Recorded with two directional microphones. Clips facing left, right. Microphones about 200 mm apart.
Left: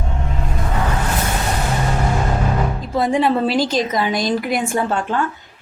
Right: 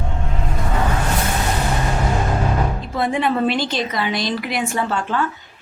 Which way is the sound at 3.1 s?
35° left (ahead or behind).